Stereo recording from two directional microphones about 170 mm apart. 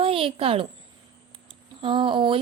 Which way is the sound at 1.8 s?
30° right (ahead or behind).